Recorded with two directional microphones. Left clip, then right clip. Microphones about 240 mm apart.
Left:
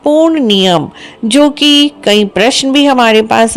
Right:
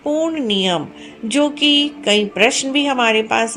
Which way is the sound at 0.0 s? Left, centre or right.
Left.